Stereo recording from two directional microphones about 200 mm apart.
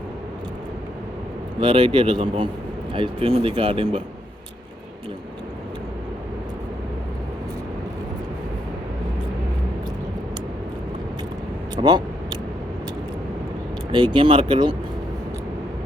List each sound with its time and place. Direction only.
1.6 s speech: 25° right (ahead or behind)
11.8 s a sound: 20° right (ahead or behind)
13.9 s speech: 25° right (ahead or behind)